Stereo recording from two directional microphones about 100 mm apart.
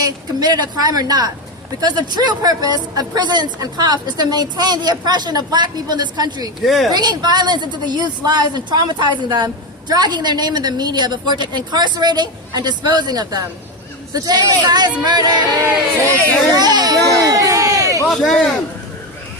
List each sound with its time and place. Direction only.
0.3 s a woman's voice: 45° right (ahead or behind)
6.7 s speech: centre (ahead or behind)
6.9 s speech: 45° right (ahead or behind)
16.0 s a child's voice: 15° left (ahead or behind)
16.6 s a sound: 45° right (ahead or behind)
18.1 s speech: 5° left (ahead or behind)